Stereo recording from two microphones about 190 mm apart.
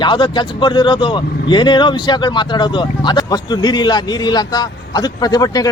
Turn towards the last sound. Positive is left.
turn(degrees=20)  # may be behind; listen again after turning